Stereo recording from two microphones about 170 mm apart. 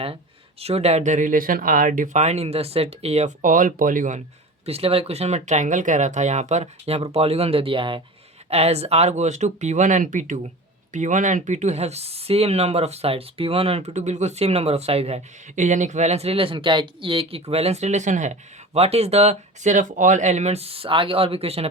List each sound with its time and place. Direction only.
0.6 s speech: 40° right (ahead or behind)
4.6 s speech: 35° right (ahead or behind)